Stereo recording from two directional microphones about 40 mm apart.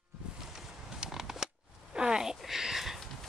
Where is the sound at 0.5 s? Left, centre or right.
Centre.